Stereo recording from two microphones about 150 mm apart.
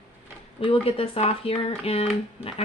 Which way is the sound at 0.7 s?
40° left (ahead or behind).